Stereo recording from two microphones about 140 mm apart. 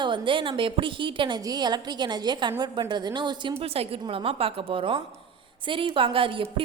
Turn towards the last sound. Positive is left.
turn(degrees=-40)  # may be behind; listen again after turning